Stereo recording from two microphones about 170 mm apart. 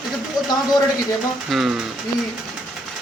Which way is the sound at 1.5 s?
5° right (ahead or behind).